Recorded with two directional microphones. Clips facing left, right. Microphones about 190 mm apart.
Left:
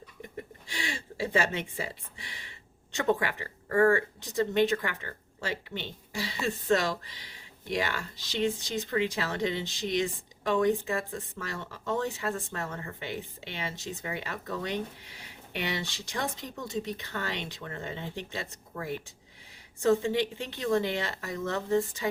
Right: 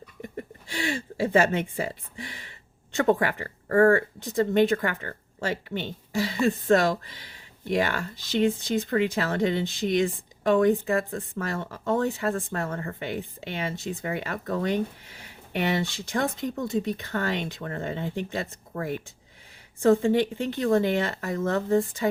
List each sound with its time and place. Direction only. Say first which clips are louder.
0.7 s speech: right 9 dB; 50° right (ahead or behind)